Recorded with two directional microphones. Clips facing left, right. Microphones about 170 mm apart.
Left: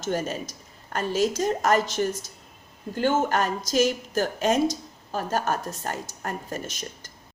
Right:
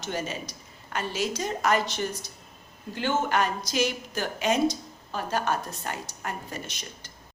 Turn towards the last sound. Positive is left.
turn(degrees=45)  # may be behind; listen again after turning